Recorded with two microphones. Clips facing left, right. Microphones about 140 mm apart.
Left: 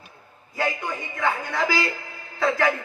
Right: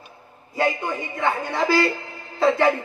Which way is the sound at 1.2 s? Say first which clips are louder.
Right 2 dB; 25° right (ahead or behind).